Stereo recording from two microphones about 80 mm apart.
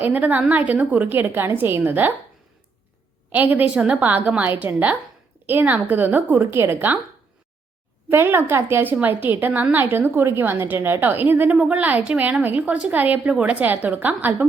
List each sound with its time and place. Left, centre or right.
0.0 s a woman's voice: right
3.3 s a woman's voice: right
8.1 s a woman's voice: right